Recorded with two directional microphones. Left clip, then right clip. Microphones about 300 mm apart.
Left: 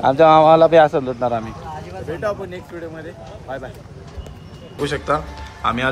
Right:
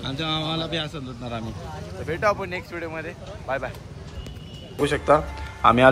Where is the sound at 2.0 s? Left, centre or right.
Right.